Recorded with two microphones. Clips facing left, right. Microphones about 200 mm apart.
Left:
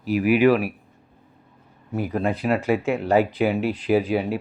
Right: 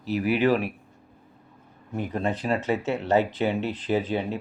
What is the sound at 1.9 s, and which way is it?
Speech, 10° left (ahead or behind).